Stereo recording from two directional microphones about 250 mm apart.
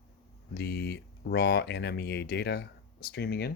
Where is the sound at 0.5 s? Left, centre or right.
Left.